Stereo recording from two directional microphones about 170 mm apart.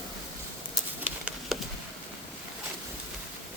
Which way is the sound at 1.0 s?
5° right (ahead or behind).